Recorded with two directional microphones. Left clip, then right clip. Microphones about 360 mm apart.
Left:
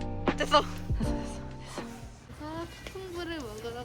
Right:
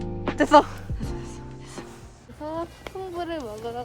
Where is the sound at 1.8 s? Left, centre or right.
Centre.